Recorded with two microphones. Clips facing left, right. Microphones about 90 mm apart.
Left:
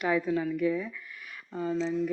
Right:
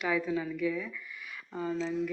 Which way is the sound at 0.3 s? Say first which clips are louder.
Left 4 dB; 15° left (ahead or behind).